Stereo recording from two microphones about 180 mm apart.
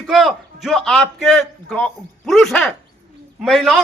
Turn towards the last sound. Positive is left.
turn(degrees=0)  # may be behind; listen again after turning